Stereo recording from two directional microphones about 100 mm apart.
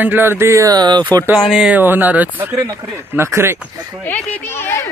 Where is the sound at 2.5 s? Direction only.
35° right (ahead or behind).